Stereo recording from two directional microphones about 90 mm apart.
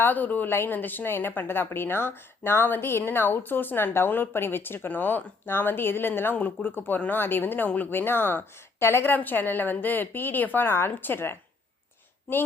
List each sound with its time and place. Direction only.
0.0 s a woman's voice: 20° left (ahead or behind)